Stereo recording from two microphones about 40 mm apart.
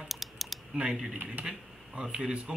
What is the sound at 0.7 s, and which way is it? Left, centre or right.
A man's voice, right.